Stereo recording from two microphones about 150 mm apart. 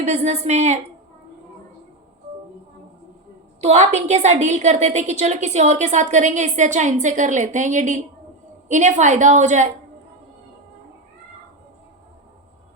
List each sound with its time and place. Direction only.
0.0 s a woman's voice: 45° right (ahead or behind)
3.6 s a woman's voice: 50° right (ahead or behind)